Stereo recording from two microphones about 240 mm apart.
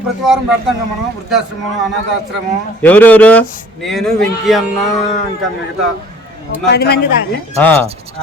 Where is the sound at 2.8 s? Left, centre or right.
Centre.